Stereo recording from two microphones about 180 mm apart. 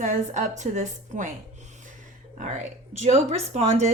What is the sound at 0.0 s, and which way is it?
A woman's voice, 45° right (ahead or behind).